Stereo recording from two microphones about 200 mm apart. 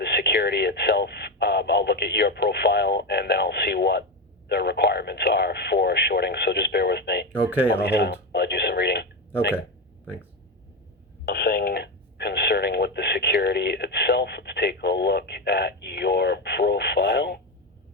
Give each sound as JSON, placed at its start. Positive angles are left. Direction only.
{"t": 0.0, "sound": "speech", "side_deg": 55}
{"t": 7.9, "sound": "a sound", "side_deg": 55}
{"t": 11.3, "sound": "telephone", "side_deg": 50}